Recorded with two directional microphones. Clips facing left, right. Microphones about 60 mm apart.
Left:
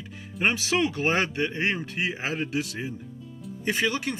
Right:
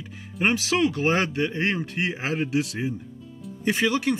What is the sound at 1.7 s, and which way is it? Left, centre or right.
Speech, centre.